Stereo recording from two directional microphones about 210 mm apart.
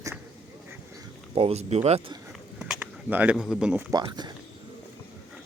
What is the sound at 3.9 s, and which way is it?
Speech, 20° right (ahead or behind).